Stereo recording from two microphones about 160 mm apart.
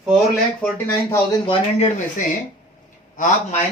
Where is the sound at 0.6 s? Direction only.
15° left (ahead or behind).